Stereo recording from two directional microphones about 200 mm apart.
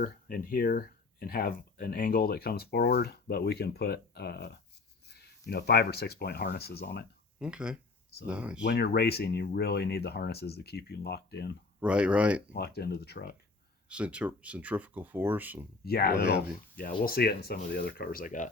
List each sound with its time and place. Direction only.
0.0 s speech: 45° left (ahead or behind)
7.3 s speech: 5° right (ahead or behind)
8.6 s speech: 55° left (ahead or behind)
11.8 s speech: 5° right (ahead or behind)
12.5 s speech: 50° left (ahead or behind)
13.9 s speech: 5° right (ahead or behind)
15.8 s speech: 50° left (ahead or behind)